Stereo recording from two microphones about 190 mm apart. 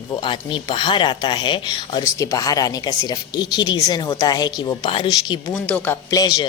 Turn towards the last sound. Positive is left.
turn(degrees=20)  # may be behind; listen again after turning